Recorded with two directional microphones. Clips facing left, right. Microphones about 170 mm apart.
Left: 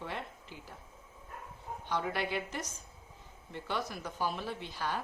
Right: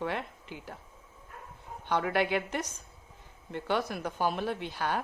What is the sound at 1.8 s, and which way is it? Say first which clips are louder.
A woman's voice: right 6 dB; 65° right (ahead or behind).